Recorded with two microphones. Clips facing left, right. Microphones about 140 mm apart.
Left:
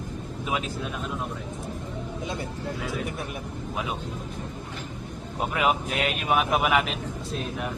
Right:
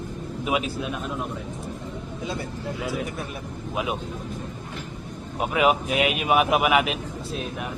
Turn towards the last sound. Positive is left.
turn(degrees=-5)  # may be behind; listen again after turning